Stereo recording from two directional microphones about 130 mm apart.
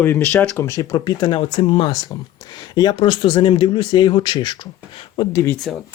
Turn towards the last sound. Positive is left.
turn(degrees=25)  # may be behind; listen again after turning